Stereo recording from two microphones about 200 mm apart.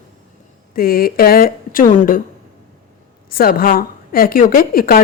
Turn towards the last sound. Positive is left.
turn(degrees=45)  # may be behind; listen again after turning